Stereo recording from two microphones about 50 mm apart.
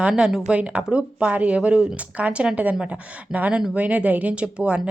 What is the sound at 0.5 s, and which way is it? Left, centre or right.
A woman's voice, right.